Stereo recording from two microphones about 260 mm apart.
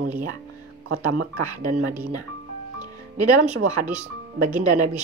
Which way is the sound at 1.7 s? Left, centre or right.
Centre.